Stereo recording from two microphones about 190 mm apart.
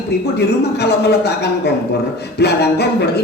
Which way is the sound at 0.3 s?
60° left (ahead or behind).